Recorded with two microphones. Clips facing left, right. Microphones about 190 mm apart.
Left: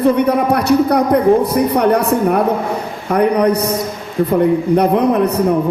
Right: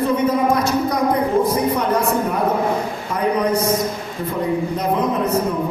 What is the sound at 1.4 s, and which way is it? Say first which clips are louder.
A man's voice: left 5 dB; 65° left (ahead or behind).